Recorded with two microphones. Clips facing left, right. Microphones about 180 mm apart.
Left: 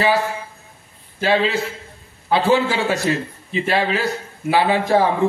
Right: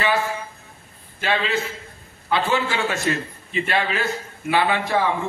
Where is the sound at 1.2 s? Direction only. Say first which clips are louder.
Left 5 dB; 35° left (ahead or behind).